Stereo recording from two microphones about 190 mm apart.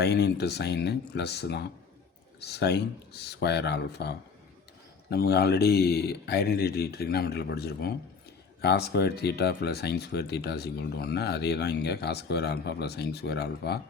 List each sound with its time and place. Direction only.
0.0 s speech: 60° left (ahead or behind)